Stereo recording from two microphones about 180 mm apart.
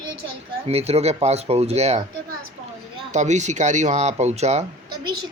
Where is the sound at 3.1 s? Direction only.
40° right (ahead or behind).